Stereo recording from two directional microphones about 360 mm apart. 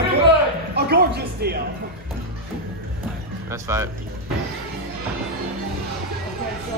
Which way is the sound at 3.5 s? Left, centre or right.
Centre.